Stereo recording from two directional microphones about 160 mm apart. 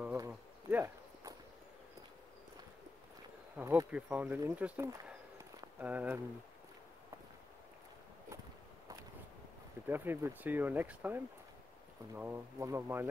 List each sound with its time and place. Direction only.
0.0 s a sound: 15° right (ahead or behind)
0.3 s insect: 10° right (ahead or behind)
3.5 s speech: 15° right (ahead or behind)
9.8 s speech: 15° right (ahead or behind)